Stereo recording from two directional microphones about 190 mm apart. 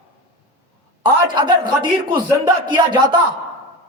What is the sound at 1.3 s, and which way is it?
Speech, 25° right (ahead or behind).